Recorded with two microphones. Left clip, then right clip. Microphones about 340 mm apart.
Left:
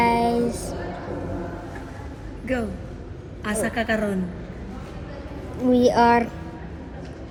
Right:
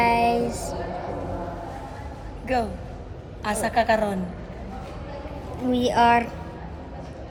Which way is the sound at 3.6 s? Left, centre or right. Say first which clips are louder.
Right 3 dB; centre.